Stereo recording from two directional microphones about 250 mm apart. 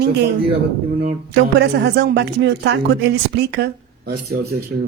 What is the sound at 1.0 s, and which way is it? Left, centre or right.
A woman's voice, right.